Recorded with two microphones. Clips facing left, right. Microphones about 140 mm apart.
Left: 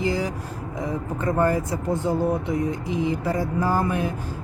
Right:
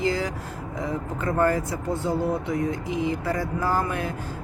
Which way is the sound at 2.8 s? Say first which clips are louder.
Left 2 dB; 15° right (ahead or behind).